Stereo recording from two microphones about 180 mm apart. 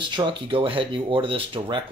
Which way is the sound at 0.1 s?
25° right (ahead or behind).